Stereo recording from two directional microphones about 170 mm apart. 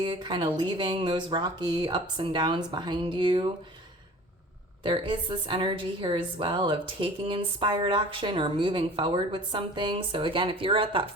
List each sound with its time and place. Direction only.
0.0 s a woman's voice: 30° right (ahead or behind)
4.8 s a woman's voice: 30° right (ahead or behind)